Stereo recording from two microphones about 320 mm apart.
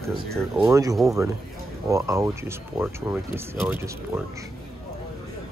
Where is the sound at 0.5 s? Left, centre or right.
Centre.